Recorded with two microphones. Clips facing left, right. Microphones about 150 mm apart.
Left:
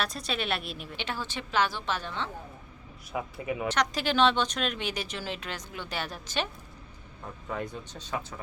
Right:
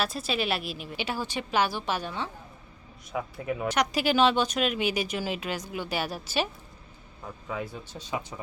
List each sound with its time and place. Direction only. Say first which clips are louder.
0.0 s speech: right 3 dB; 5° right (ahead or behind)
3.1 s speech: right 1 dB; centre (ahead or behind)
3.7 s speech: right 4 dB; 10° right (ahead or behind)